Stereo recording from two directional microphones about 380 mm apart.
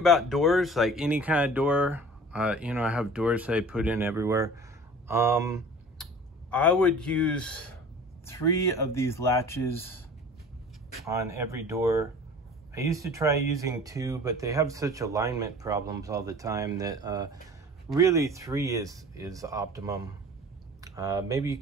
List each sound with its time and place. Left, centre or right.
0.0 s speech: centre
6.5 s speech: centre
11.0 s speech: centre